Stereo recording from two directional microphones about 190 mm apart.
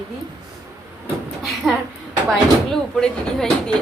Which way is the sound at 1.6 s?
Centre (ahead or behind).